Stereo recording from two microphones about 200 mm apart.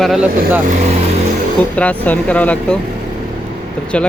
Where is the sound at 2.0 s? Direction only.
10° left (ahead or behind).